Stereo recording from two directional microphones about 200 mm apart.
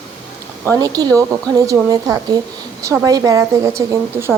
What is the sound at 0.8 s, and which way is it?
A woman's voice, 20° right (ahead or behind).